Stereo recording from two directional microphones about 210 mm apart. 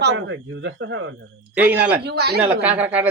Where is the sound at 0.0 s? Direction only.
60° right (ahead or behind).